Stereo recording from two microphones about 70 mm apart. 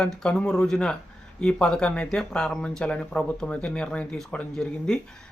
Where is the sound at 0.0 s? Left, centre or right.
Centre.